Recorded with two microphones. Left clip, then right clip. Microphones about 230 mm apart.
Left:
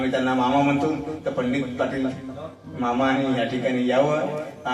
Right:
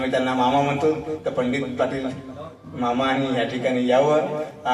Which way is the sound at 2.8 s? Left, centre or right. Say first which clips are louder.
Even; right.